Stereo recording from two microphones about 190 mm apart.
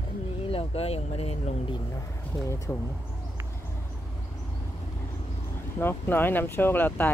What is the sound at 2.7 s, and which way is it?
Speech, 15° left (ahead or behind).